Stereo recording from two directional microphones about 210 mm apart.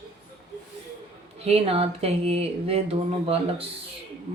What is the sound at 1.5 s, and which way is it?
Speech, 25° right (ahead or behind).